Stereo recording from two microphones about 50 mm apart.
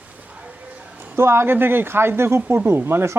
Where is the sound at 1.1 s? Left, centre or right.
Right.